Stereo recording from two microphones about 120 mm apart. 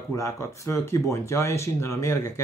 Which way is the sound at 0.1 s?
25° left (ahead or behind).